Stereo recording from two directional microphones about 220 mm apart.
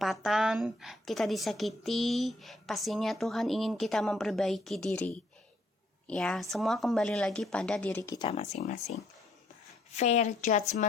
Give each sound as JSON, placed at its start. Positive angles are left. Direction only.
{"t": 0.0, "sound": "a woman's voice", "side_deg": 0}
{"t": 8.5, "sound": "a woman's voice", "side_deg": 35}